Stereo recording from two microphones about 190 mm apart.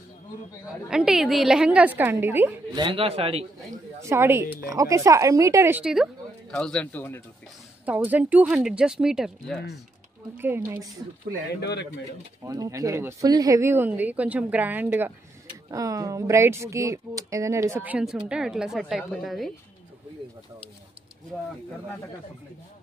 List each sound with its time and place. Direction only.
0.8 s speech: 5° right (ahead or behind)
2.8 s a man's voice: 30° right (ahead or behind)
4.0 s speech: 15° right (ahead or behind); by 7.2 s 10° left (ahead or behind)
7.8 s speech: 10° right (ahead or behind)
11.6 s speech: 60° left (ahead or behind)
12.4 s speech: 20° right (ahead or behind); by 19.5 s centre (ahead or behind)